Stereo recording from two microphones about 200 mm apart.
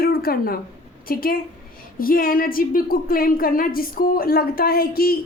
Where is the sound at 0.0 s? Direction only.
50° left (ahead or behind).